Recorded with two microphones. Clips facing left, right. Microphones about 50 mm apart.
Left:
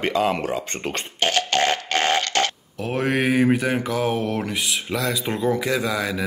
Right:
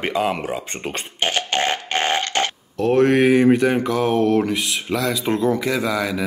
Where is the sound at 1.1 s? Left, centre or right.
Right.